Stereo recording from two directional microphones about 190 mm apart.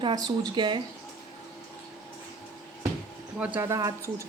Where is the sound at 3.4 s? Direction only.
10° right (ahead or behind).